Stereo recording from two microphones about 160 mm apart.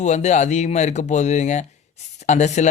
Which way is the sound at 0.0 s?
45° left (ahead or behind).